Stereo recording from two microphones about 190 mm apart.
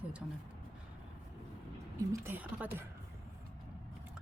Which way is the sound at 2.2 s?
10° right (ahead or behind).